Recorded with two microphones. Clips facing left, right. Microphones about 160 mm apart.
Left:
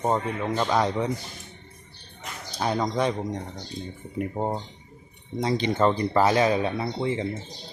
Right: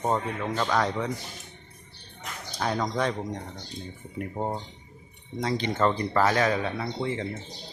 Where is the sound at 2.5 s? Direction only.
15° left (ahead or behind).